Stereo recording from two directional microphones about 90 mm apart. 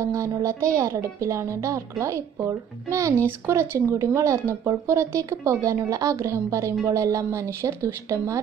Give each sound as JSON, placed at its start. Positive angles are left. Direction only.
{"t": 0.0, "sound": "a woman's voice", "side_deg": -35}